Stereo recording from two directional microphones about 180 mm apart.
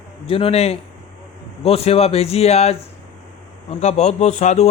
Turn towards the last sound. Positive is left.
turn(degrees=40)  # may be behind; listen again after turning